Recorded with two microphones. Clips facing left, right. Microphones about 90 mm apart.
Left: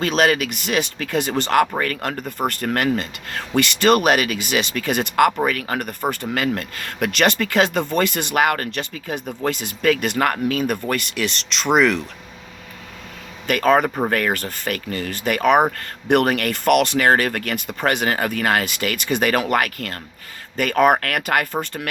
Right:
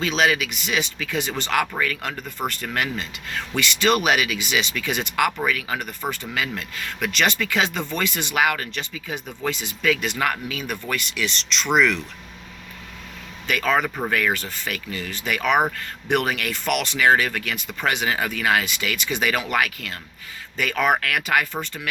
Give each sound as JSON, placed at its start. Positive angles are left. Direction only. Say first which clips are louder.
{"t": 0.0, "sound": "speech", "louder": "left 3 dB", "side_deg": 50}
{"t": 13.5, "sound": "speech", "louder": "left 5 dB", "side_deg": 45}